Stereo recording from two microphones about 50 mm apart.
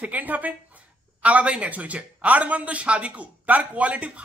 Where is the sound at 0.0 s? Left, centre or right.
Right.